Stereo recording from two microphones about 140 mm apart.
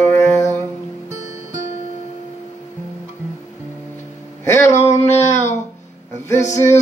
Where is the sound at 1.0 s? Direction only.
55° left (ahead or behind).